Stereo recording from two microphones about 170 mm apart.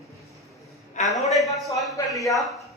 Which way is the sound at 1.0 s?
45° left (ahead or behind).